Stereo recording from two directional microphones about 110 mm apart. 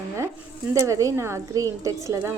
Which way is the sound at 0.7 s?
30° right (ahead or behind).